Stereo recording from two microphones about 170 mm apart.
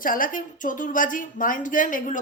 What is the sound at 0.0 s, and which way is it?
Speech, 55° left (ahead or behind).